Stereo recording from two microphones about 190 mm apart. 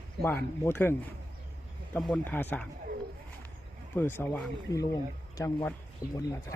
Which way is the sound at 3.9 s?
10° left (ahead or behind).